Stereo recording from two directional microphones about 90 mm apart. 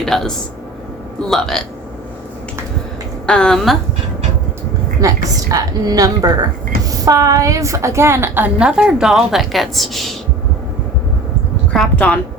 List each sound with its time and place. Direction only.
0.0 s a woman's voice: 5° left (ahead or behind)
3.2 s a woman's voice: 10° left (ahead or behind)
4.9 s a woman's voice: 40° right (ahead or behind)
8.5 s a woman's voice: 10° right (ahead or behind)
11.7 s a sound: 10° left (ahead or behind)